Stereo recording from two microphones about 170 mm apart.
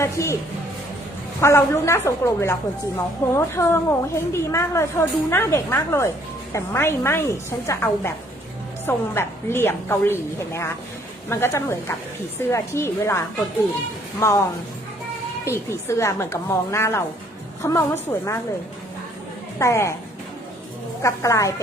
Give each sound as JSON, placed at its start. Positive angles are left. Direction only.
{"t": 0.0, "sound": "a woman's voice", "side_deg": 15}
{"t": 1.4, "sound": "a woman's voice", "side_deg": 15}
{"t": 14.2, "sound": "a woman's voice", "side_deg": 15}
{"t": 15.4, "sound": "a woman's voice", "side_deg": 15}
{"t": 19.5, "sound": "a woman's voice", "side_deg": 15}
{"t": 21.0, "sound": "a woman's voice", "side_deg": 20}